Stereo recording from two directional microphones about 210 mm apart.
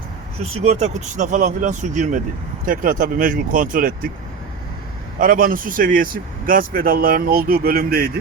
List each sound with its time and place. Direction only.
0.6 s speech: 30° right (ahead or behind)
5.2 s speech: 45° right (ahead or behind)